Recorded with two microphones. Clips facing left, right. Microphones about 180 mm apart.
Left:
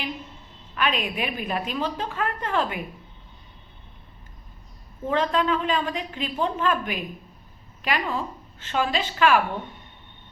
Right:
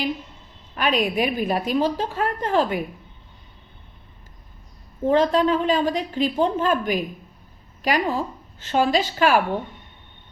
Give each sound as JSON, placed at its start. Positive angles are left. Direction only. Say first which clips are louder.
{"t": 0.8, "sound": "a woman's voice", "louder": "right 5 dB", "side_deg": -40}
{"t": 5.0, "sound": "a woman's voice", "louder": "right 5 dB", "side_deg": -35}